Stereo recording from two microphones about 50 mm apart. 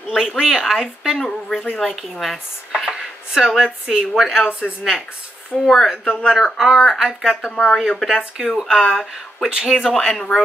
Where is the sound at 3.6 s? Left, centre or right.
Centre.